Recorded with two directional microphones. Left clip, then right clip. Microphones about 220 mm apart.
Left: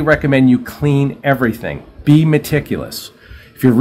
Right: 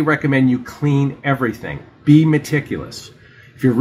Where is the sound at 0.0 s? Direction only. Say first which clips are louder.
Left 4 dB; 35° left (ahead or behind).